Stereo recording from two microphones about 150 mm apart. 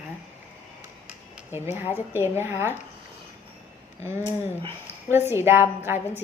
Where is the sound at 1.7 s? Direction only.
15° right (ahead or behind).